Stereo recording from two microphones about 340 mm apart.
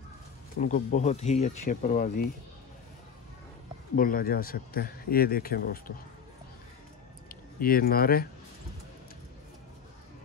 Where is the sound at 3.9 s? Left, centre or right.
Left.